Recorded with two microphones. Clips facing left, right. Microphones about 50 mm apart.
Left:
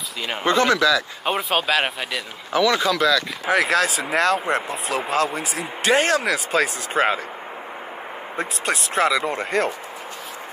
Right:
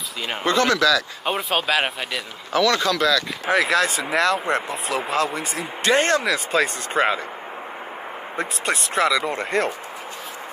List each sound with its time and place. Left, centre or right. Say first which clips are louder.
0.5 s speech: left 1 dB; centre
1.2 s speech: left 1 dB; centre
2.5 s speech: even; centre
8.4 s speech: even; centre